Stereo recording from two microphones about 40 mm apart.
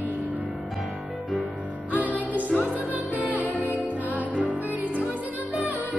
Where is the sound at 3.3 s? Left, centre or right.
Right.